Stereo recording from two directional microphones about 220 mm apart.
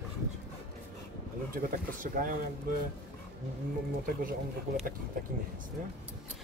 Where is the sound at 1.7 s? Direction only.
40° right (ahead or behind).